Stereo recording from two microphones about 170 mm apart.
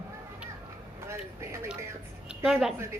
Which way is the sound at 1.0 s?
15° right (ahead or behind).